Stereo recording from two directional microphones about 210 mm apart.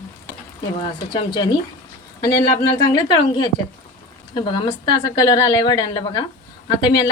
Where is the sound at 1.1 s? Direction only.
20° left (ahead or behind).